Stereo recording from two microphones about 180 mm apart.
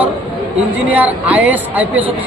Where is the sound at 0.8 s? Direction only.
10° right (ahead or behind).